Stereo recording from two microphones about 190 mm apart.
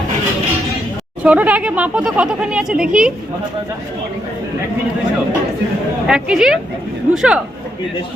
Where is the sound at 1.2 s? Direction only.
5° right (ahead or behind).